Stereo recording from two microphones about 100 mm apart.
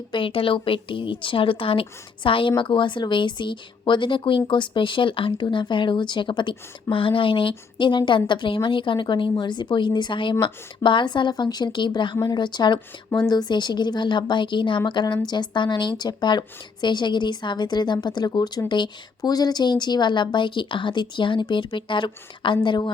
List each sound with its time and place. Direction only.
0.1 s a woman's voice: 60° left (ahead or behind)